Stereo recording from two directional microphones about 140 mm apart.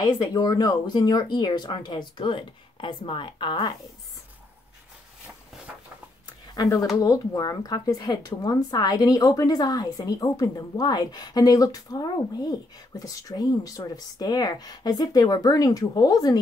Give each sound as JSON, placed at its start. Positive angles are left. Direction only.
{"t": 0.0, "sound": "speech", "side_deg": 30}
{"t": 6.5, "sound": "speech", "side_deg": 25}